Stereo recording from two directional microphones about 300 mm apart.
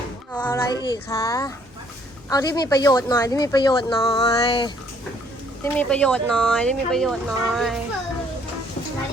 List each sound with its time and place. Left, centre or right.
0.3 s child singing: centre
2.3 s a woman's voice: centre